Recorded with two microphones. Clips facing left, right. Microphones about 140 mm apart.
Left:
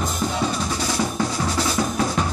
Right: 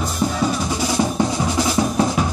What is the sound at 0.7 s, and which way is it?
Drum, 20° right (ahead or behind).